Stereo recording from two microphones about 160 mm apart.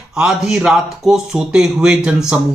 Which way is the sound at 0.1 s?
5° right (ahead or behind).